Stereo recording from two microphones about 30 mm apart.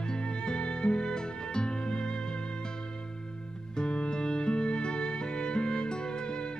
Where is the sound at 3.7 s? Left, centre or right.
Left.